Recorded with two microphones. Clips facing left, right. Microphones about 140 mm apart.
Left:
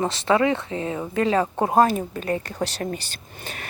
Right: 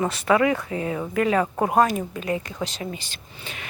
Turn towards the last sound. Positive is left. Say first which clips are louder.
# left 2 dB
turn(degrees=40)  # may be behind; listen again after turning